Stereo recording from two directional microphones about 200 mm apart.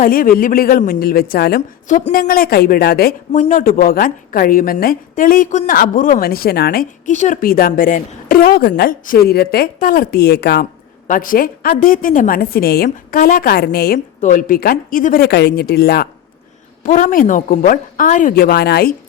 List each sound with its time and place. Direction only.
0.0 s a woman's voice: 45° left (ahead or behind)
14.2 s a woman's voice: 40° left (ahead or behind)
16.8 s a woman's voice: 40° left (ahead or behind)